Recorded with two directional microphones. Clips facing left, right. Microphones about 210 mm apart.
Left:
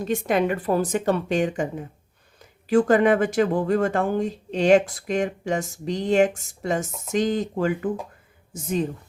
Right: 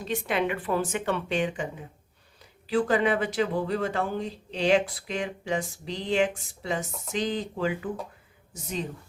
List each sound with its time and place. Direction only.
0.0 s speech: 45° left (ahead or behind)
2.6 s speech: 45° left (ahead or behind)